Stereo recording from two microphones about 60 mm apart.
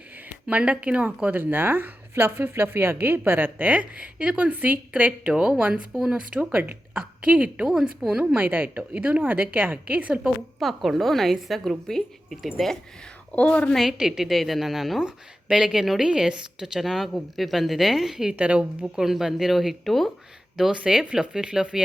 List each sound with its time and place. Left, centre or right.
0.4 s speech: centre
5.3 s a woman's voice: centre
7.6 s a woman's voice: centre
8.4 s a woman's voice: right
8.8 s speech: centre
10.6 s a woman's voice: centre
13.3 s a woman's voice: left
13.7 s a woman's voice: centre
18.3 s speech: right
18.9 s a woman's voice: centre
20.7 s a woman's voice: centre